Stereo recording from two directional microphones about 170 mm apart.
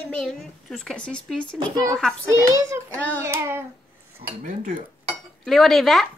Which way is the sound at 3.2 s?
15° right (ahead or behind).